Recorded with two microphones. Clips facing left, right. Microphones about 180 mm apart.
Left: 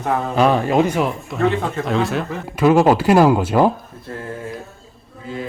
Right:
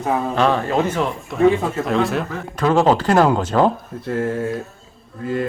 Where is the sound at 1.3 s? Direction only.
5° right (ahead or behind).